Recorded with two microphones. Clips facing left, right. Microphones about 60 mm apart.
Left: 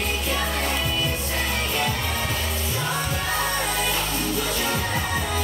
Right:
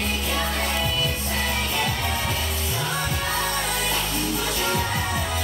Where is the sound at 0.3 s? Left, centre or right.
Centre.